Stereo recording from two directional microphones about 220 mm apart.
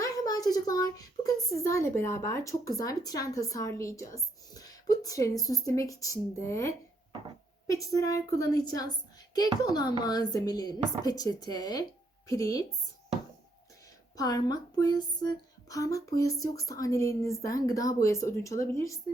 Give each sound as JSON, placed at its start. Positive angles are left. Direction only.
{"t": 0.0, "sound": "a sound", "side_deg": 15}
{"t": 1.2, "sound": "speech", "side_deg": 15}
{"t": 14.2, "sound": "speech", "side_deg": 15}